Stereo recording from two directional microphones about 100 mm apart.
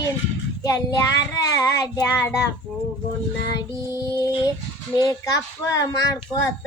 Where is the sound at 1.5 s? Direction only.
35° left (ahead or behind).